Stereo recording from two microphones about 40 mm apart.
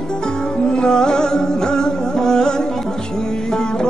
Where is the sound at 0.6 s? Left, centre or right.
Left.